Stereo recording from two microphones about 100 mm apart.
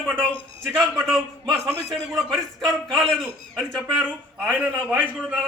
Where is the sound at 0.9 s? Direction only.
Centre (ahead or behind).